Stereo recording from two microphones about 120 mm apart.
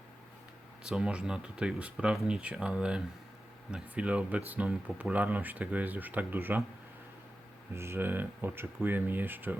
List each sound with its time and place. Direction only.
0.9 s speech: 5° right (ahead or behind)
7.7 s speech: 20° right (ahead or behind)